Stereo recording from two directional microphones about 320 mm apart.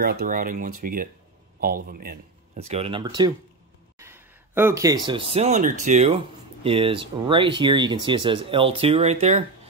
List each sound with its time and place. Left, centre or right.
0.0 s speech: right